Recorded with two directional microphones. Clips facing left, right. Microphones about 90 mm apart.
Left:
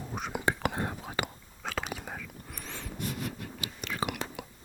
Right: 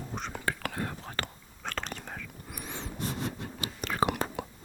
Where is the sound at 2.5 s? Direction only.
10° right (ahead or behind).